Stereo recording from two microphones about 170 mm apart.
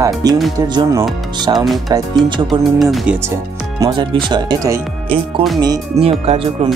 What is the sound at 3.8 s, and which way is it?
Speech, 25° right (ahead or behind).